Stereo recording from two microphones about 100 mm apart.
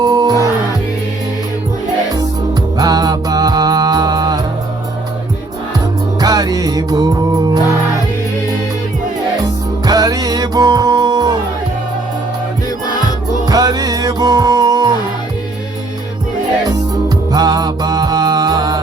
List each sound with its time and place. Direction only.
0.0 s music: 40° right (ahead or behind)
2.7 s music: 40° right (ahead or behind)
6.1 s music: 40° right (ahead or behind)
9.8 s music: 40° right (ahead or behind)
13.5 s music: 40° right (ahead or behind)
17.3 s music: 40° right (ahead or behind)